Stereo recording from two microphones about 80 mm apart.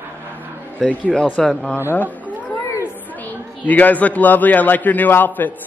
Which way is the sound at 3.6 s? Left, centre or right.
Left.